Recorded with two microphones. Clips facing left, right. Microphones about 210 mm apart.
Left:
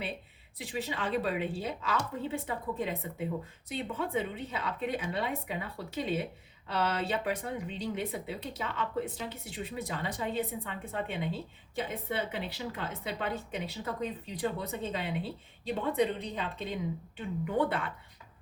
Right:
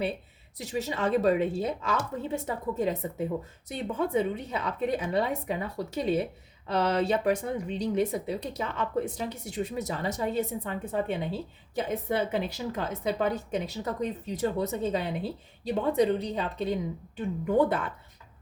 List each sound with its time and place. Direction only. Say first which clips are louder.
0.6 s a woman's voice: right 6 dB; 45° right (ahead or behind)